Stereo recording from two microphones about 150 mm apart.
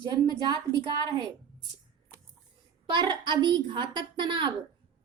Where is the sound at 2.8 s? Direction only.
30° right (ahead or behind).